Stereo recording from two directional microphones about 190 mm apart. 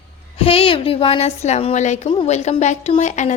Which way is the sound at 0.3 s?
30° left (ahead or behind).